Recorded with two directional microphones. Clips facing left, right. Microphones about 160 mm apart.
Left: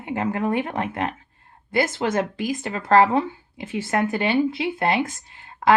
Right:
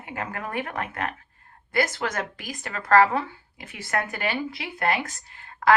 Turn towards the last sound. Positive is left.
turn(degrees=20)  # may be behind; listen again after turning